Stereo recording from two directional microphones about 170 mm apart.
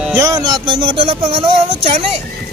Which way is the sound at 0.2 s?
20° right (ahead or behind).